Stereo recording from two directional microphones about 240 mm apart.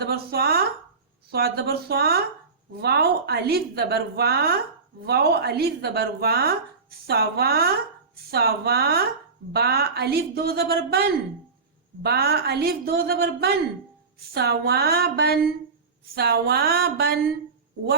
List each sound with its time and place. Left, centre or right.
0.0 s a sound: right
1.3 s a woman's voice: right
12.0 s a woman's voice: right